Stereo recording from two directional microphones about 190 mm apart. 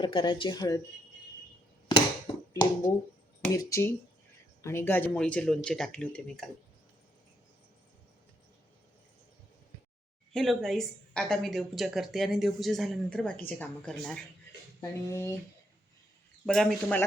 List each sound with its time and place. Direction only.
0.0 s speech: 25° left (ahead or behind)
2.5 s speech: 20° left (ahead or behind)
3.5 s a sound: 15° left (ahead or behind)
4.6 s speech: 15° left (ahead or behind)
10.3 s speech: centre (ahead or behind)
14.8 s a sound: 15° left (ahead or behind)
16.5 s speech: 5° left (ahead or behind)